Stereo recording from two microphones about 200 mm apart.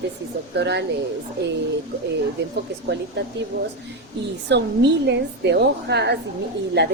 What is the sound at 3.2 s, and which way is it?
Speech, 60° right (ahead or behind).